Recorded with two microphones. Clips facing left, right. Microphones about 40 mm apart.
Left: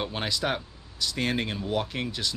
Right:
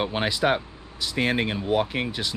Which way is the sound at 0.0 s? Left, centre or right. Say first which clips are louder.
Right 6 dB; centre.